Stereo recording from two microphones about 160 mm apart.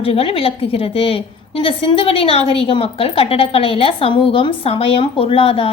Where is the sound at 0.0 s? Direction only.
35° left (ahead or behind).